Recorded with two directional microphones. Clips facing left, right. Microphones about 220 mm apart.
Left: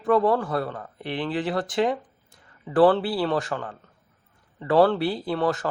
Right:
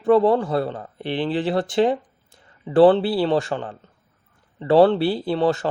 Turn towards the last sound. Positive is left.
turn(degrees=-25)  # may be behind; listen again after turning